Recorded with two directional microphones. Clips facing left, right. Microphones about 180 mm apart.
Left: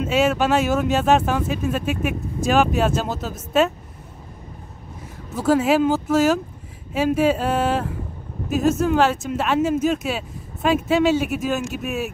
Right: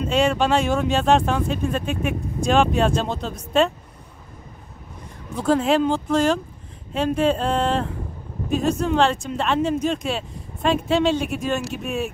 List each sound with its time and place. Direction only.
0.0 s speech: 5° left (ahead or behind)
5.3 s speech: 5° left (ahead or behind)